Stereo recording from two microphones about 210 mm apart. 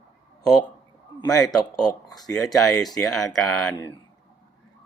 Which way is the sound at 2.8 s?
Centre (ahead or behind).